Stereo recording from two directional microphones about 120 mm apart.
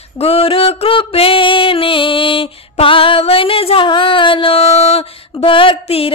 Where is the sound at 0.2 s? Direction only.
55° left (ahead or behind).